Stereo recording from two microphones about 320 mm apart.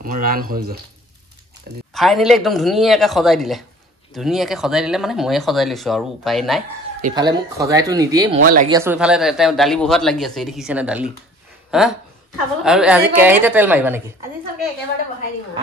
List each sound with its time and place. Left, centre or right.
0.0 s speech: right
2.0 s speech: centre
7.2 s speech: centre
8.4 s speech: right
8.6 s speech: centre